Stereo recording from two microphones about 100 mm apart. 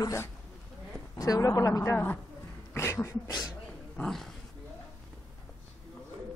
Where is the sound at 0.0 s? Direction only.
30° left (ahead or behind).